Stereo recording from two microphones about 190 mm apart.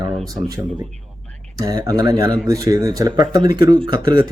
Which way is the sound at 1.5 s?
20° right (ahead or behind).